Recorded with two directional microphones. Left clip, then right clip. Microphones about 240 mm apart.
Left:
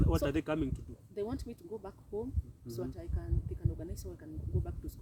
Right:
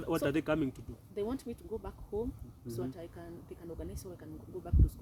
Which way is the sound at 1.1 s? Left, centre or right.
Centre.